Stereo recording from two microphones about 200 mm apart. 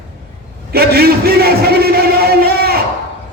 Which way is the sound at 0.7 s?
50° right (ahead or behind).